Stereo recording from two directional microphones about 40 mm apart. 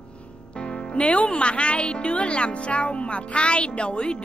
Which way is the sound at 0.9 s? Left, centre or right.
Left.